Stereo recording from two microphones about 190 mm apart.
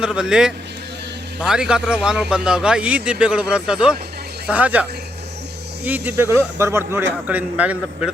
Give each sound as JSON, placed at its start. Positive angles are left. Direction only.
{"t": 0.0, "sound": "speech", "side_deg": -5}